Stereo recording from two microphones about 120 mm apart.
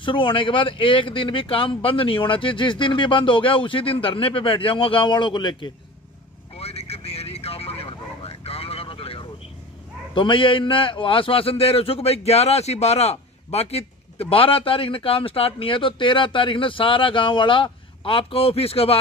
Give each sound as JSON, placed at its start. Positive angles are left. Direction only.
{"t": 0.0, "sound": "a man's voice", "side_deg": 45}
{"t": 6.5, "sound": "vehicle", "side_deg": 60}
{"t": 10.1, "sound": "a man's voice", "side_deg": 45}